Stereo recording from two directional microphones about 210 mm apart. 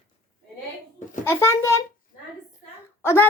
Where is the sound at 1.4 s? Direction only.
15° left (ahead or behind).